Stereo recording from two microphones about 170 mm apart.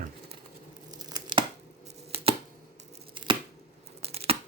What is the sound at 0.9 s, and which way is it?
Tearing, 25° right (ahead or behind).